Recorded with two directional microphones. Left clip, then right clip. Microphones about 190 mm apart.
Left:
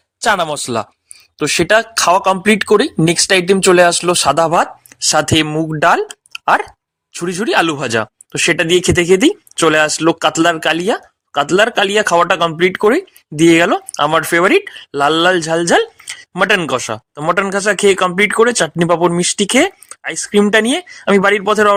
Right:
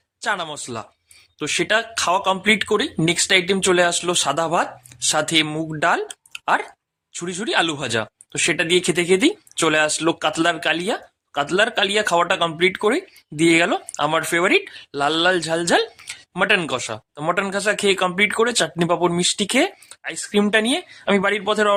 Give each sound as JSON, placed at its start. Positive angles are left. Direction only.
{"t": 0.2, "sound": "speech", "side_deg": 45}